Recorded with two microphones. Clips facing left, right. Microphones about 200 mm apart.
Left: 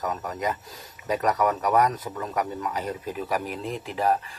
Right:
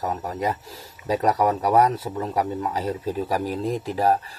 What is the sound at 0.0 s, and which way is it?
Speech, 30° right (ahead or behind).